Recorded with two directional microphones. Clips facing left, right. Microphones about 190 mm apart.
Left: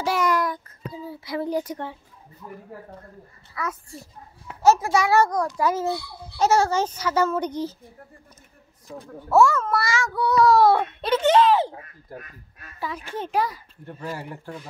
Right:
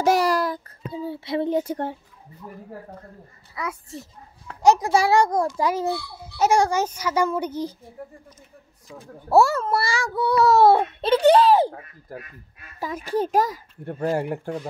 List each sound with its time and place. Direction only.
0.0 s a sound: 40° right (ahead or behind)
3.5 s a child's voice: 20° right (ahead or behind)
9.3 s a child's voice: 35° right (ahead or behind)
12.8 s a child's voice: 40° right (ahead or behind)